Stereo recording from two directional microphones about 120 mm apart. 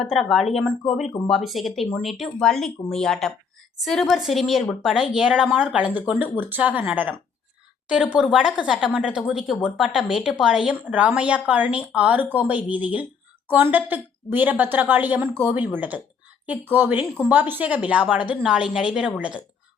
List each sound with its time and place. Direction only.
0.0 s a woman's voice: centre (ahead or behind)